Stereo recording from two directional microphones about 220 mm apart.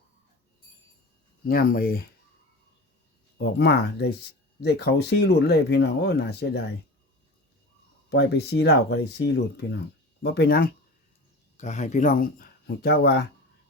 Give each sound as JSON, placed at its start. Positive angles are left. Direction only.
{"t": 1.5, "sound": "speech", "side_deg": 45}
{"t": 3.3, "sound": "speech", "side_deg": 50}
{"t": 8.1, "sound": "speech", "side_deg": 50}
{"t": 11.5, "sound": "speech", "side_deg": 30}